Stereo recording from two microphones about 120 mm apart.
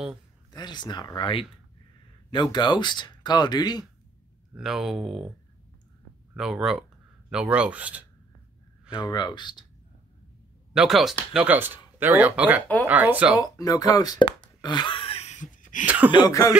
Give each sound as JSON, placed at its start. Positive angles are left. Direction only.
{"t": 0.5, "sound": "speech", "side_deg": 35}
{"t": 4.6, "sound": "speech", "side_deg": -5}
{"t": 6.3, "sound": "speech", "side_deg": -5}
{"t": 8.9, "sound": "speech", "side_deg": 40}
{"t": 10.7, "sound": "speech", "side_deg": -5}
{"t": 11.3, "sound": "speech", "side_deg": -15}
{"t": 13.4, "sound": "speech", "side_deg": 30}
{"t": 14.2, "sound": "plop", "side_deg": 40}
{"t": 15.8, "sound": "speech", "side_deg": -10}
{"t": 16.1, "sound": "speech", "side_deg": 35}